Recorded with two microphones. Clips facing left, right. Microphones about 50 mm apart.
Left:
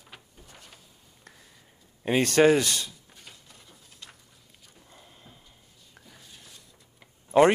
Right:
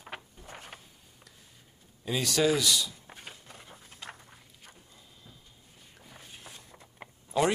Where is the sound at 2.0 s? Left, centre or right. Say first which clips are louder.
Left 7 dB; left.